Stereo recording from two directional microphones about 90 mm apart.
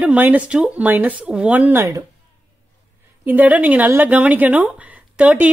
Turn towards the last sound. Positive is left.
turn(degrees=-15)  # may be behind; listen again after turning